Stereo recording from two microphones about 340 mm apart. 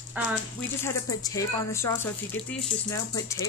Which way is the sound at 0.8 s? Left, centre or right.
Centre.